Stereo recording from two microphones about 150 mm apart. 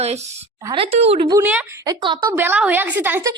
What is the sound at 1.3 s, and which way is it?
Speech, 15° right (ahead or behind).